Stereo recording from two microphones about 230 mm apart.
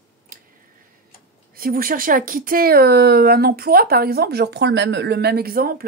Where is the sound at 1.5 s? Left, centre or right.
Right.